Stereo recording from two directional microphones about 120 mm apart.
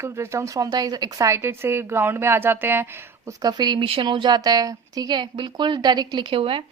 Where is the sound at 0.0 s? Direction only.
25° right (ahead or behind).